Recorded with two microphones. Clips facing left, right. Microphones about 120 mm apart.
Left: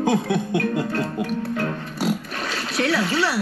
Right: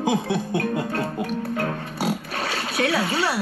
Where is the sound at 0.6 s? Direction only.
30° right (ahead or behind).